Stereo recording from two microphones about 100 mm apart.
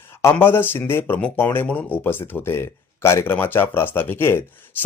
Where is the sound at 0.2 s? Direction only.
25° left (ahead or behind).